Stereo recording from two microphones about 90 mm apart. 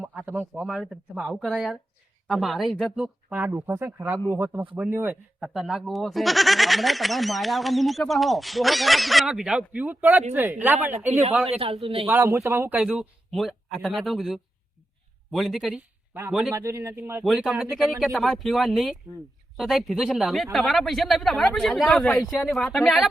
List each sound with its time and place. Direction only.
0.5 s speech: 5° right (ahead or behind)
3.3 s speech: 25° right (ahead or behind)
5.4 s speech: 5° right (ahead or behind)
9.3 s speech: 10° right (ahead or behind)
11.6 s a man's voice: 90° right
12.0 s speech: 25° right (ahead or behind)
12.8 s speech: 10° right (ahead or behind)
13.3 s speech: centre (ahead or behind)
16.5 s speech: 30° right (ahead or behind)
17.2 s speech: centre (ahead or behind)